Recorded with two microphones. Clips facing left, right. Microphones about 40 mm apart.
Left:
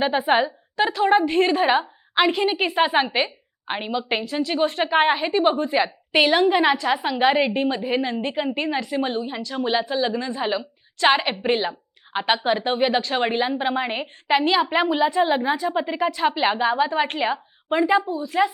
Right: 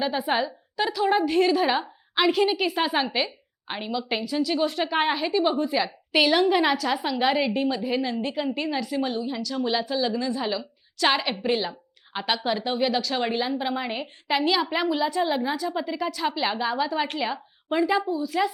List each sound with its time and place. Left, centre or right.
0.0 s a woman's voice: left